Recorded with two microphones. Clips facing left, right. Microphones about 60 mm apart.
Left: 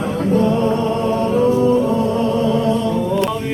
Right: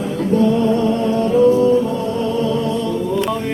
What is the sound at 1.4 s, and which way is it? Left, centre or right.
Music, left.